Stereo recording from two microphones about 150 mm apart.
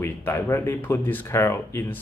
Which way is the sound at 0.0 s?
15° left (ahead or behind).